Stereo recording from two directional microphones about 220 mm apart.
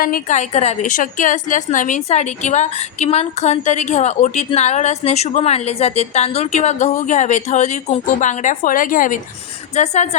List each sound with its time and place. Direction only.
0.0 s a woman's voice: 35° left (ahead or behind)